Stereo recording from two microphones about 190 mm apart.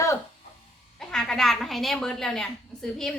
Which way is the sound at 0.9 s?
5° left (ahead or behind).